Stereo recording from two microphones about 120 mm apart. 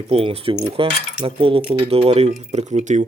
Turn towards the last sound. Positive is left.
turn(degrees=-80)